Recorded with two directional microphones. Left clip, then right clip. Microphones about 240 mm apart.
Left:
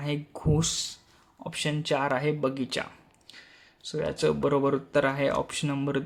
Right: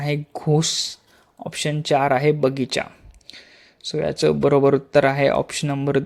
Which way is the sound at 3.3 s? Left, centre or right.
Right.